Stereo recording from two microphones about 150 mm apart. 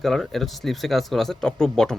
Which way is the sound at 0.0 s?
Centre (ahead or behind).